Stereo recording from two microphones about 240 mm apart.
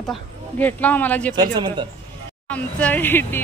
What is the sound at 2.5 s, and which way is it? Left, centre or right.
Speech, centre.